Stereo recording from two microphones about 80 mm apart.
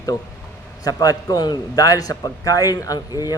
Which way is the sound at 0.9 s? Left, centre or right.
Left.